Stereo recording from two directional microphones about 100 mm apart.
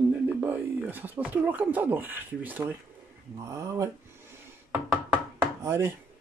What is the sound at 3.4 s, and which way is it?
Speech, 30° right (ahead or behind).